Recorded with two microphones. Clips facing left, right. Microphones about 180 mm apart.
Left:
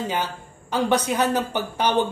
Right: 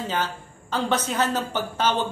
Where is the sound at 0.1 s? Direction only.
15° left (ahead or behind).